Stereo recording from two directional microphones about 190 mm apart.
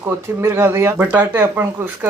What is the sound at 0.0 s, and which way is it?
Speech, 10° right (ahead or behind).